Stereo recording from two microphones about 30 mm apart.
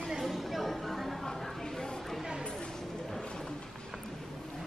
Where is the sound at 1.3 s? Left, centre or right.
Centre.